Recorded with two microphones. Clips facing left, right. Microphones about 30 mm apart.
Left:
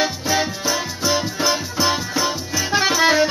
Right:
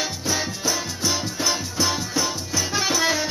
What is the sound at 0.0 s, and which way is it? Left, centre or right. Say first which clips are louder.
Music: left 6 dB; centre.